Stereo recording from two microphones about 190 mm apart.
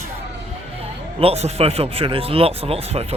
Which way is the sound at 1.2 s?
35° right (ahead or behind).